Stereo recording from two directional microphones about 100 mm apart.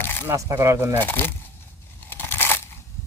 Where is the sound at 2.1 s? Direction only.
20° left (ahead or behind).